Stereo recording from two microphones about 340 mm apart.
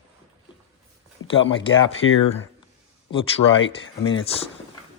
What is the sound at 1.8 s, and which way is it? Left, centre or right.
Speech, left.